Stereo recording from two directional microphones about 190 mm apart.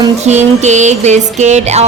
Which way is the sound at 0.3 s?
40° right (ahead or behind).